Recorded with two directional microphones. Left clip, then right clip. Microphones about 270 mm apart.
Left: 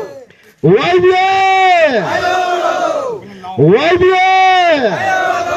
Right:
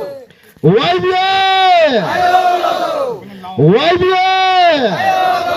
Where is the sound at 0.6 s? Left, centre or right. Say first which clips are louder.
Left 2 dB; left.